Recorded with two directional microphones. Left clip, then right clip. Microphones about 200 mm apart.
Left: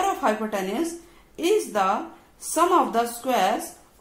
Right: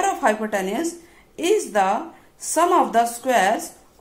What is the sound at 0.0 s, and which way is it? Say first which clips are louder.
A woman's voice: right 3 dB; 20° right (ahead or behind).